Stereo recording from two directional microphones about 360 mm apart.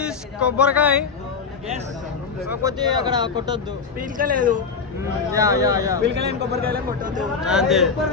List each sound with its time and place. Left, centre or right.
0.0 s speech: centre
2.5 s speech: centre
4.0 s a man's voice: right
4.9 s speech: centre
6.1 s a man's voice: right
7.4 s speech: centre